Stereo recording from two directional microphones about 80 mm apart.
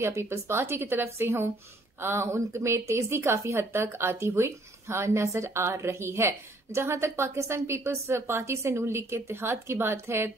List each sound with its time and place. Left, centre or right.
0.0 s speech: right